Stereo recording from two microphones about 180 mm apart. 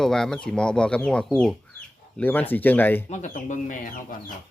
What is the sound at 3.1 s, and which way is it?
Speech, 45° left (ahead or behind).